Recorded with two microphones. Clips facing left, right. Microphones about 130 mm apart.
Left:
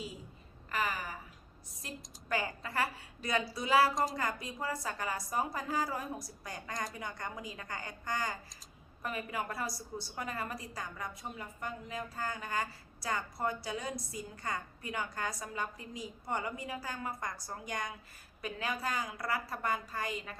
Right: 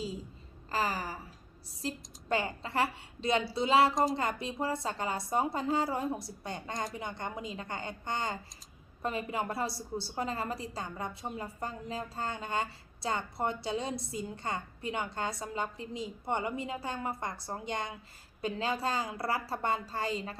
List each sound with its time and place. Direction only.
0.7 s a woman's voice: 35° right (ahead or behind)